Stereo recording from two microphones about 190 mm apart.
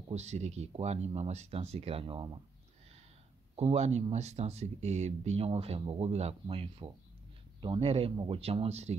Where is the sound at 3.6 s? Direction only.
35° right (ahead or behind).